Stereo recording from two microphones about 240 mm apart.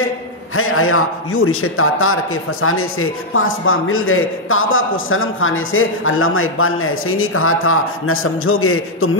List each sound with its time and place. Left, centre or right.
0.6 s a man's voice: left